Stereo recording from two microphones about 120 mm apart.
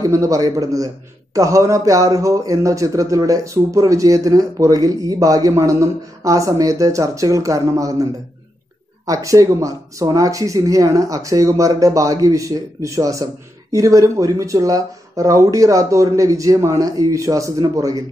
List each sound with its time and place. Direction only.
0.0 s speech: 25° right (ahead or behind)